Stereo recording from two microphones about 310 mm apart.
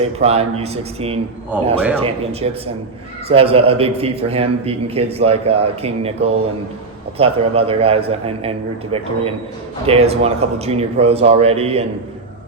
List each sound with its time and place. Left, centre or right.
0.0 s a man's voice: centre